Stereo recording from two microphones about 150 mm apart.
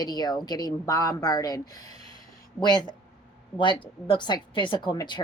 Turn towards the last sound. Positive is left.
turn(degrees=30)  # may be behind; listen again after turning